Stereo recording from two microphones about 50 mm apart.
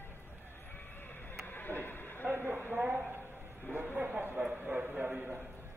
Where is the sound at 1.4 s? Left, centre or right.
Left.